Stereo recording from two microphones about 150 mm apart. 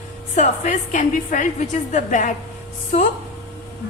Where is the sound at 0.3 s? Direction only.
55° left (ahead or behind).